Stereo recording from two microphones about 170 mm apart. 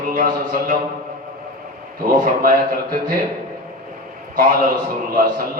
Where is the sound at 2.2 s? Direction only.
60° right (ahead or behind).